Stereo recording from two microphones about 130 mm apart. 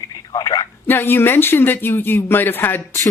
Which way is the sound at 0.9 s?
15° left (ahead or behind).